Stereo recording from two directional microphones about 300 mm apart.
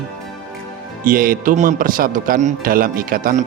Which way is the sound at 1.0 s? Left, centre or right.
Right.